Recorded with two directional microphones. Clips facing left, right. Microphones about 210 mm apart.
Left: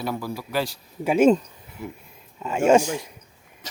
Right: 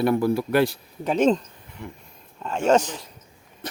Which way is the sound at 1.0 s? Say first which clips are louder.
Left 3 dB; 10° left (ahead or behind).